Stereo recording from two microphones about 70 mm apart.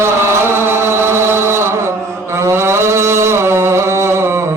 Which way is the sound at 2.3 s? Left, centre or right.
Right.